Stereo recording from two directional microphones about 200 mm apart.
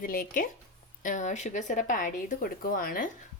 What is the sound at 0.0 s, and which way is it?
Speech, 45° left (ahead or behind).